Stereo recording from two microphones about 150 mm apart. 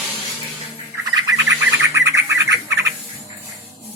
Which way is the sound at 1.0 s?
25° right (ahead or behind).